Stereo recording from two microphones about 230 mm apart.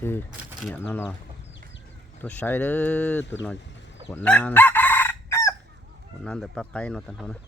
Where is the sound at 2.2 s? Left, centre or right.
Centre.